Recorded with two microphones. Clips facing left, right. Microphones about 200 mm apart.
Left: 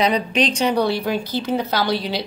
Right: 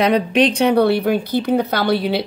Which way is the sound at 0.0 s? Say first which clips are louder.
Right 4 dB; 55° right (ahead or behind).